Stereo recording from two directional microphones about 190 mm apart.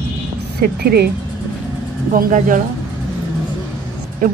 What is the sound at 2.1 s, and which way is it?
Speech, 45° right (ahead or behind).